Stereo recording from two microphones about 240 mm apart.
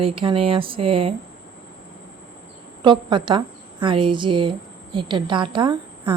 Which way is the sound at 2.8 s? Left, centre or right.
Centre.